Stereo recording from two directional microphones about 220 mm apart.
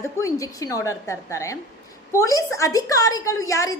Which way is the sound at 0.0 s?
15° left (ahead or behind).